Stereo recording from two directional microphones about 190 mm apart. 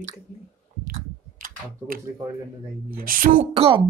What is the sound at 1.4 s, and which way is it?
A woman's voice, 45° right (ahead or behind).